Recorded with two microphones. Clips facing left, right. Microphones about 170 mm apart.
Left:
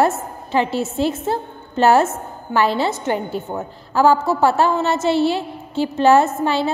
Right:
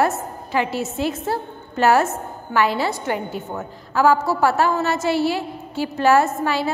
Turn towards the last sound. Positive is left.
turn(degrees=25)  # may be behind; listen again after turning